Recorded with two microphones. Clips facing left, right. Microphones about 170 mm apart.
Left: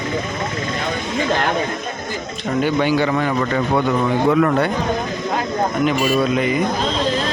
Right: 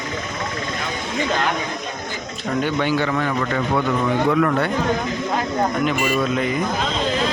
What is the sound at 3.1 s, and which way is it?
Speech, 20° left (ahead or behind).